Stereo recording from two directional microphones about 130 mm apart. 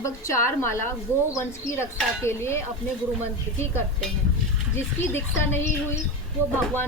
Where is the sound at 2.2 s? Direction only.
20° left (ahead or behind).